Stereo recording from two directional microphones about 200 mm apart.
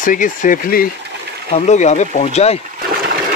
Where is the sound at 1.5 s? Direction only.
35° left (ahead or behind).